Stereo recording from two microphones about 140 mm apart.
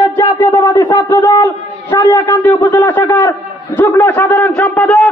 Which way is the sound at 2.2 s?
10° left (ahead or behind).